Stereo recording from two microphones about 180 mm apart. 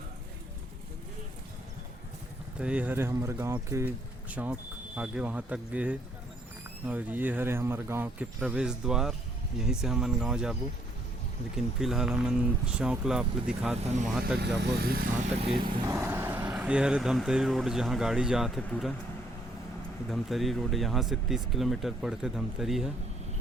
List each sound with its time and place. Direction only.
2.6 s speech: 5° right (ahead or behind)
14.3 s speech: 65° right (ahead or behind)
15.3 s vehicle: 35° right (ahead or behind)
15.9 s speech: 15° right (ahead or behind)
20.1 s speech: centre (ahead or behind)